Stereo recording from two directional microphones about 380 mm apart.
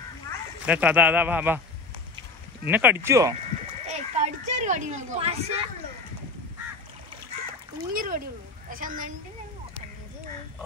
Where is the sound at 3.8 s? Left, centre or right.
Centre.